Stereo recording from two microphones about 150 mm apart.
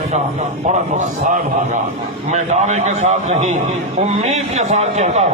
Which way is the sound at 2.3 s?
50° right (ahead or behind).